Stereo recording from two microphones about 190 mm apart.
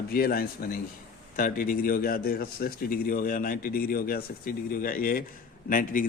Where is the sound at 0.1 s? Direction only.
50° left (ahead or behind).